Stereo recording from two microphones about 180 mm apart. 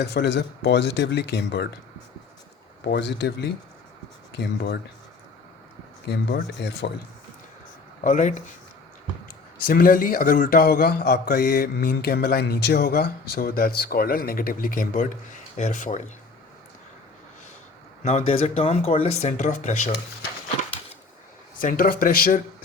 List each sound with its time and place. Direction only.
0.0 s speech: 65° left (ahead or behind)
2.8 s speech: 70° left (ahead or behind)
6.1 s speech: 70° left (ahead or behind)
8.0 s speech: 45° left (ahead or behind)
9.6 s a man's voice: 55° left (ahead or behind)
18.0 s speech: 35° left (ahead or behind)
21.6 s speech: 50° left (ahead or behind)